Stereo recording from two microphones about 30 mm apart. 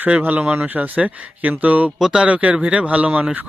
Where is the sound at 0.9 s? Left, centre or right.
Right.